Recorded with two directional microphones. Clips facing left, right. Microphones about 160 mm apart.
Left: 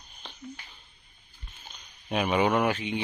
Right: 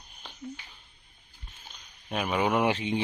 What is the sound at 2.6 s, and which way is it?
Speech, 25° right (ahead or behind).